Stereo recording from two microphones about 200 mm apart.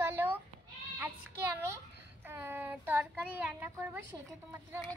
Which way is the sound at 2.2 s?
10° right (ahead or behind).